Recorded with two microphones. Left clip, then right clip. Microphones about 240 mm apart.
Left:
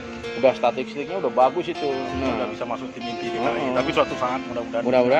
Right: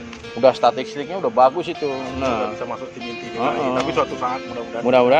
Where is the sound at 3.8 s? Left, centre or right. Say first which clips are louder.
Right 1 dB; left.